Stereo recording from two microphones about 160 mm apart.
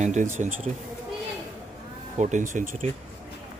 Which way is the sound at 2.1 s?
50° right (ahead or behind).